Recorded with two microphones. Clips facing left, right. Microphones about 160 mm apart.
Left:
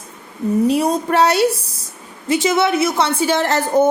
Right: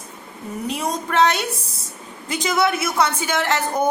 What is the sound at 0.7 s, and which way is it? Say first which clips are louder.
A woman's voice: left 8 dB; 35° left (ahead or behind).